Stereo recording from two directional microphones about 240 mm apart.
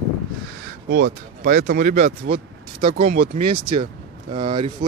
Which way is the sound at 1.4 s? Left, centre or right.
Right.